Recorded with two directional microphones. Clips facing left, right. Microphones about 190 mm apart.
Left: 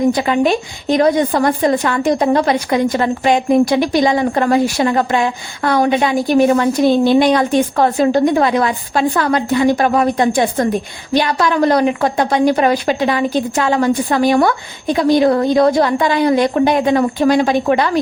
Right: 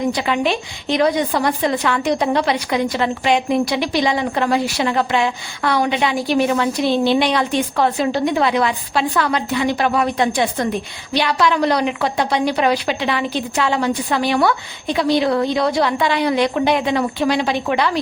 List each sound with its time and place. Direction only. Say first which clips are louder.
0.1 s a woman's voice: left 5 dB; 45° left (ahead or behind)